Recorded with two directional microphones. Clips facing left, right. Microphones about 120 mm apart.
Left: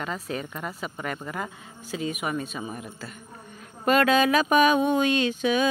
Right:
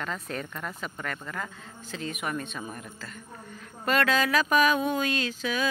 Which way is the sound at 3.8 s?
15° left (ahead or behind).